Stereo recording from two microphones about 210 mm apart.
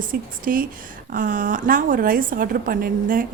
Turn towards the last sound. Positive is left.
turn(degrees=-40)  # may be behind; listen again after turning